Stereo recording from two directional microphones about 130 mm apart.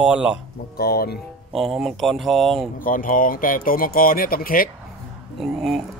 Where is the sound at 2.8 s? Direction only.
90° left.